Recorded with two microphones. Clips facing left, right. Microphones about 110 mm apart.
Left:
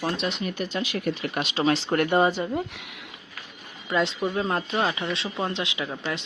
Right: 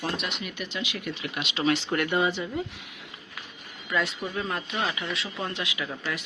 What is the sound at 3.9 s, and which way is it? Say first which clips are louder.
Speech: left 4 dB; 30° left (ahead or behind).